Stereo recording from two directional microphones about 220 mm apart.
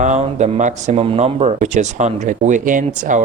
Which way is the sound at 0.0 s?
30° right (ahead or behind).